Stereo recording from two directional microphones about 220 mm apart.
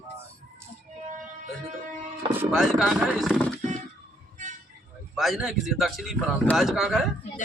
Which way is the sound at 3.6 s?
35° right (ahead or behind).